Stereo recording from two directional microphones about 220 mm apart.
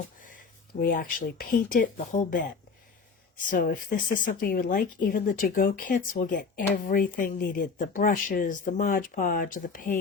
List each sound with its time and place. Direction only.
0.2 s speech: 40° left (ahead or behind)